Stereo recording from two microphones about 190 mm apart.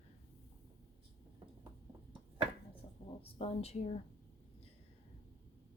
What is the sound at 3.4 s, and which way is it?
Speech, 30° left (ahead or behind).